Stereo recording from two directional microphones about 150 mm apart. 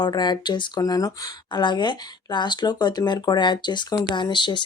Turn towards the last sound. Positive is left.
turn(degrees=30)  # may be behind; listen again after turning